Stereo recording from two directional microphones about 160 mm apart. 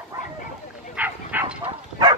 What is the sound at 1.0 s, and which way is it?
Bow-wow, 10° right (ahead or behind).